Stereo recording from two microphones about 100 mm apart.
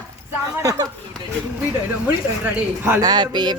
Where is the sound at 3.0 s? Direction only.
50° right (ahead or behind).